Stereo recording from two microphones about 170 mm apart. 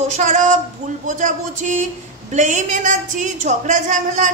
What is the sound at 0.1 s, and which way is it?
A woman's voice, 45° right (ahead or behind).